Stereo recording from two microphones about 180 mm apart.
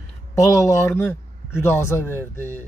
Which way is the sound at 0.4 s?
15° left (ahead or behind).